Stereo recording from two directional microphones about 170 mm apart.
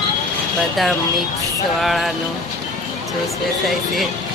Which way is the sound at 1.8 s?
Centre (ahead or behind).